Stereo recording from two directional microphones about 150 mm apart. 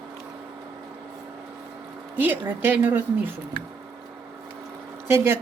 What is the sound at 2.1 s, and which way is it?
Speech, 10° right (ahead or behind).